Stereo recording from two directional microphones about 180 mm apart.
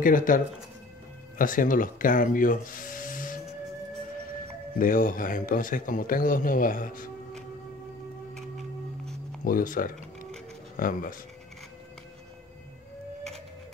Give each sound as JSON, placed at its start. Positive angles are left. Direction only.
{"t": 0.0, "sound": "a man's voice", "side_deg": 50}
{"t": 1.4, "sound": "speech", "side_deg": 50}
{"t": 4.7, "sound": "a man's voice", "side_deg": 50}
{"t": 8.4, "sound": "music", "side_deg": 0}
{"t": 9.4, "sound": "a man's voice", "side_deg": 50}